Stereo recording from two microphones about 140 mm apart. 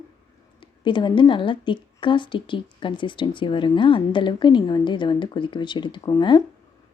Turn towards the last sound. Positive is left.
turn(degrees=30)  # may be behind; listen again after turning